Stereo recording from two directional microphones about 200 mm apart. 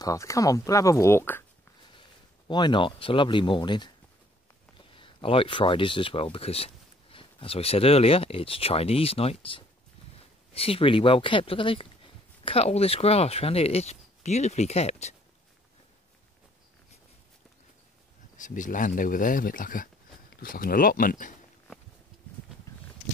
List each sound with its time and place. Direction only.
0.0 s speech: 15° left (ahead or behind)
2.0 s speech: 20° left (ahead or behind)
18.4 s speech: 40° left (ahead or behind)